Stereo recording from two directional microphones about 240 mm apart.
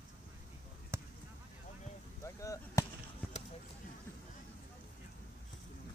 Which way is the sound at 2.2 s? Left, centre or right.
Centre.